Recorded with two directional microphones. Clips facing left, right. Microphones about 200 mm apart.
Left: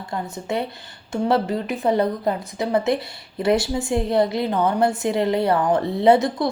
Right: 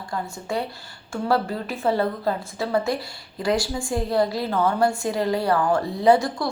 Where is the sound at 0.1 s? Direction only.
20° left (ahead or behind).